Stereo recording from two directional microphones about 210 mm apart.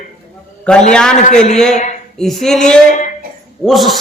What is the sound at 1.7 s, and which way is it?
Speech, 35° left (ahead or behind).